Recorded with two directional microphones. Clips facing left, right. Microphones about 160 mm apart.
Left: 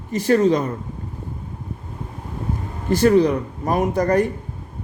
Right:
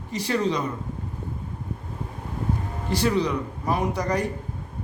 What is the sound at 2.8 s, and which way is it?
Speech, 50° left (ahead or behind).